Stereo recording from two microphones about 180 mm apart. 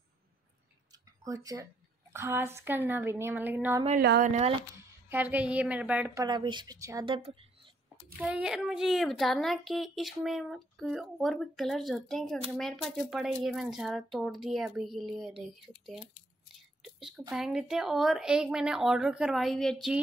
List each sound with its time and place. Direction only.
0.9 s a sound: 20° right (ahead or behind)
2.1 s a woman's voice: 15° right (ahead or behind)
4.2 s speech: 40° right (ahead or behind)
4.7 s a woman's voice: 10° right (ahead or behind)
6.2 s a woman's voice: 25° right (ahead or behind)
7.1 s a woman's voice: 30° right (ahead or behind)
8.2 s a woman's voice: 5° right (ahead or behind)
17.3 s a woman's voice: 5° right (ahead or behind)